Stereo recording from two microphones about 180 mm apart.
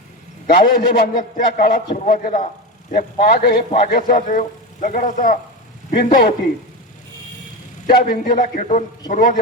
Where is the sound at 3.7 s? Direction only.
45° left (ahead or behind).